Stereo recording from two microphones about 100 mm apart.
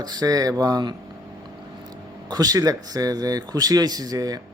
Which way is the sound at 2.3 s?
40° right (ahead or behind).